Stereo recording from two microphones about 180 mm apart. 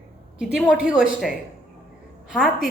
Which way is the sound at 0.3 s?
5° right (ahead or behind).